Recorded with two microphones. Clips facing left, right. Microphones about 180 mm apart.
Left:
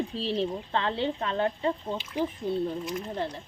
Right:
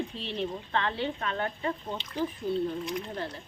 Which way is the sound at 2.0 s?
5° left (ahead or behind).